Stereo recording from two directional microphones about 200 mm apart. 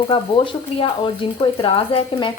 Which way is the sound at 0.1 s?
25° left (ahead or behind).